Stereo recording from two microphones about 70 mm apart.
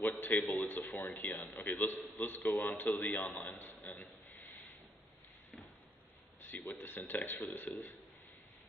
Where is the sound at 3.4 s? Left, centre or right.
Left.